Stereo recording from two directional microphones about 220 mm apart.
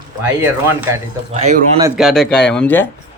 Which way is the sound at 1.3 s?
30° right (ahead or behind).